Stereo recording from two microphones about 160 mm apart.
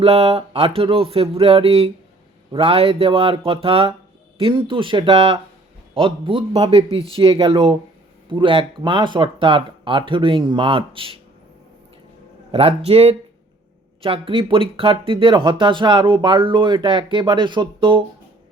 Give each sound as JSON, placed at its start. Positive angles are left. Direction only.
{"t": 0.0, "sound": "speech", "side_deg": -35}
{"t": 12.5, "sound": "speech", "side_deg": -35}